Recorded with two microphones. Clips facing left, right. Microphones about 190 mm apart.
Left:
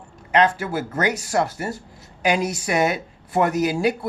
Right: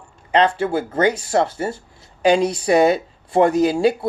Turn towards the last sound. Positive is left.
turn(degrees=-25)  # may be behind; listen again after turning